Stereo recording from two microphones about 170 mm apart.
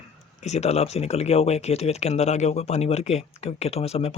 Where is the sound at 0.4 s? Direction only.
40° left (ahead or behind).